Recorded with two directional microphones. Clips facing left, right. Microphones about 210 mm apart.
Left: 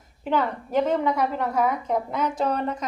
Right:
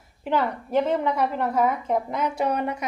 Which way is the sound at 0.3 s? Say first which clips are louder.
Even; 10° right (ahead or behind).